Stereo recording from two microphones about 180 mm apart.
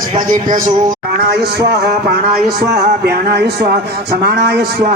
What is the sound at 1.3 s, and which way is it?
Speech, 65° right (ahead or behind).